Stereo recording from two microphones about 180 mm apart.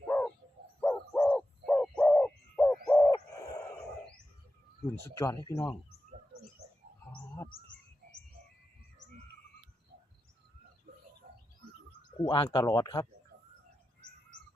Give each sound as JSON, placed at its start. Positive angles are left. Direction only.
{"t": 0.1, "sound": "bird", "side_deg": 15}
{"t": 5.0, "sound": "speech", "side_deg": 15}
{"t": 8.0, "sound": "bird", "side_deg": -65}
{"t": 12.2, "sound": "speech", "side_deg": 25}